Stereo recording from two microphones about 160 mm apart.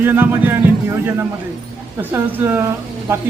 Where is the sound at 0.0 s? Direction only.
15° right (ahead or behind).